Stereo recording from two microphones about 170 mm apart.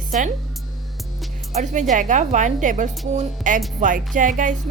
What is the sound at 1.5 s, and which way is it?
A woman's voice, 45° right (ahead or behind).